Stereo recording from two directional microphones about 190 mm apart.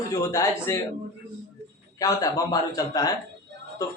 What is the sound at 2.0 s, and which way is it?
A woman's voice, 15° left (ahead or behind).